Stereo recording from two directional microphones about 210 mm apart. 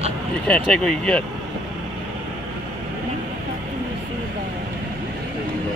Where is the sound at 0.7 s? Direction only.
5° left (ahead or behind).